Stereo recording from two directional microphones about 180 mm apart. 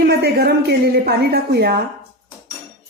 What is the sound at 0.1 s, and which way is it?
A woman's voice, 65° right (ahead or behind).